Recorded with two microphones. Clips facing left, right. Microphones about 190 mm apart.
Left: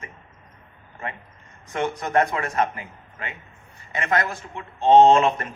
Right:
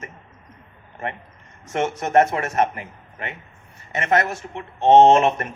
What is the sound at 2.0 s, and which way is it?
Speech, 25° right (ahead or behind).